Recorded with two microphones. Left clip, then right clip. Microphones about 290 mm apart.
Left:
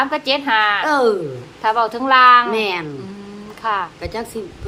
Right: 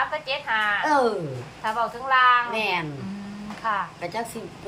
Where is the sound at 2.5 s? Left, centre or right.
Centre.